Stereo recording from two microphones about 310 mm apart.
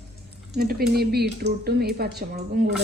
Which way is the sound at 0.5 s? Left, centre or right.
Right.